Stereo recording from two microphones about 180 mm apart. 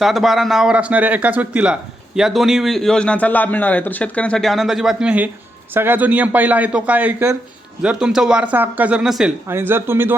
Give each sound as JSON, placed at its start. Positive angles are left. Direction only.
{"t": 0.0, "sound": "a man's voice", "side_deg": 0}